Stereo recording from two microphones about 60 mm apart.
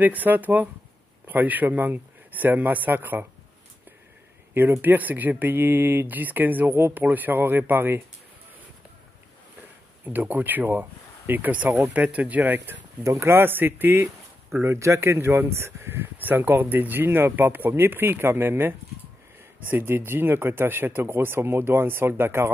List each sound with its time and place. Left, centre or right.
0.0 s speech: right
4.6 s speech: right
10.0 s speech: right
13.0 s speech: right
16.3 s speech: right